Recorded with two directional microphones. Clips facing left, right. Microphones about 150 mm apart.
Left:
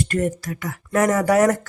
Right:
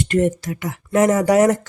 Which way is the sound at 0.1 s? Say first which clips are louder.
Right 5 dB; 20° right (ahead or behind).